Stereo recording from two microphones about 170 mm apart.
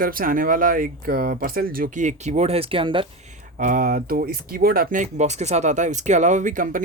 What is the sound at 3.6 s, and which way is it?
Speech, 50° right (ahead or behind).